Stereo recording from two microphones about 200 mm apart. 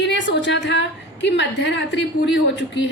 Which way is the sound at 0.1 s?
60° left (ahead or behind).